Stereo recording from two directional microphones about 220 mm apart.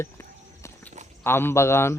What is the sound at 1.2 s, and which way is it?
Speech, 10° left (ahead or behind).